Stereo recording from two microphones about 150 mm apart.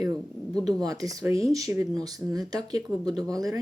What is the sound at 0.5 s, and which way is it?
Speech, 25° right (ahead or behind).